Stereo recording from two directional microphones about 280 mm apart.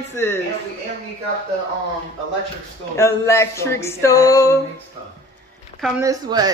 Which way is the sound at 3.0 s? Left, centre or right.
Centre.